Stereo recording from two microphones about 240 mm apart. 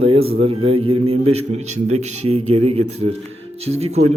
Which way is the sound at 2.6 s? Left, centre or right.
Right.